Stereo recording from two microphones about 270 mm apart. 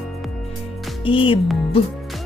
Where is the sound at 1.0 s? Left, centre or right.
Centre.